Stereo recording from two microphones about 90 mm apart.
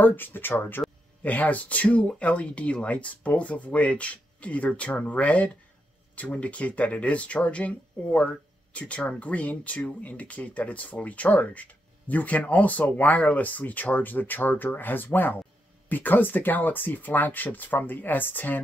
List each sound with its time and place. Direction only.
0.0 s speech: 20° left (ahead or behind)